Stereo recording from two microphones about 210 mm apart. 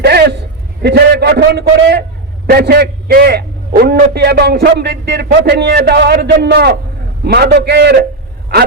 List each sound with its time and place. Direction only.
0.0 s a man's voice: 50° right (ahead or behind)